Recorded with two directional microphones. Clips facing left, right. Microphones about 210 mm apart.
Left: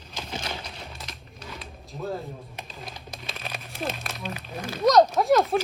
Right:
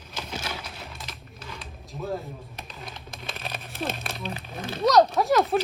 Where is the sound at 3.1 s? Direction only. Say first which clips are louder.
Right 2 dB; 50° right (ahead or behind).